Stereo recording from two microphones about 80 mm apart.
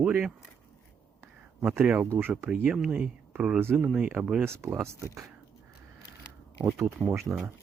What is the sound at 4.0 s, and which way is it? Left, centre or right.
Speech, centre.